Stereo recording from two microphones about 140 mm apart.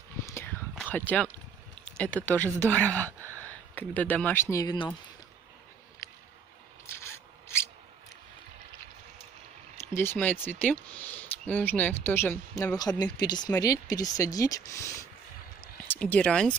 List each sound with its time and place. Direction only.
0.3 s whispering: 20° left (ahead or behind)
0.7 s speech: 10° left (ahead or behind)
3.1 s a sound: 20° right (ahead or behind)
3.4 s speech: 10° left (ahead or behind)
6.9 s a sound: 15° left (ahead or behind)
9.8 s speech: 15° left (ahead or behind)
13.0 s speech: 30° left (ahead or behind)
15.9 s speech: 10° left (ahead or behind)